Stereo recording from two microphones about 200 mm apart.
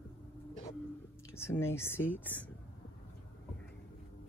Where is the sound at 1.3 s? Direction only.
10° left (ahead or behind).